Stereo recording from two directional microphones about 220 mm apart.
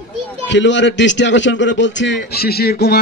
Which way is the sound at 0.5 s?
55° left (ahead or behind).